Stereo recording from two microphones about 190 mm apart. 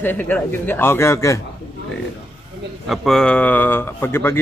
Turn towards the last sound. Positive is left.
turn(degrees=10)  # may be behind; listen again after turning